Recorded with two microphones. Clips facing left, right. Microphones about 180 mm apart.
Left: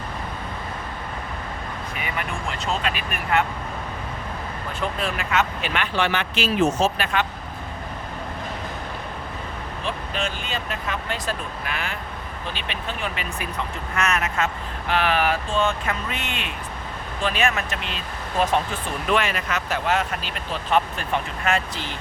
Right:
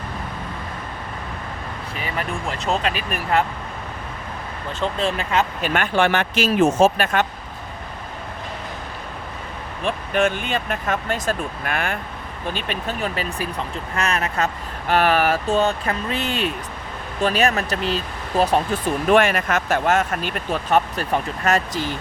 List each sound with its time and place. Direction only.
2.0 s vehicle: 35° right (ahead or behind)
4.8 s speech: 25° right (ahead or behind)
5.7 s speech: 50° right (ahead or behind)
9.8 s speech: 55° right (ahead or behind)